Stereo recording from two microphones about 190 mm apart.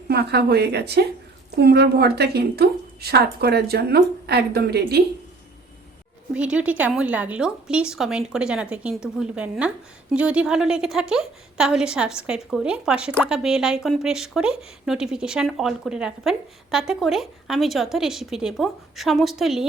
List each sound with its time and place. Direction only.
0.1 s a woman's voice: 60° right (ahead or behind)
6.3 s speech: 5° right (ahead or behind)